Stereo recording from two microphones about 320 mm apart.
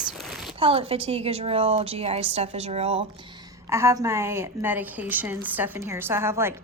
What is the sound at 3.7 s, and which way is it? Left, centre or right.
A woman's voice, centre.